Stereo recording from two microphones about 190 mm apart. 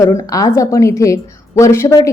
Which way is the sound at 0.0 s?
20° left (ahead or behind).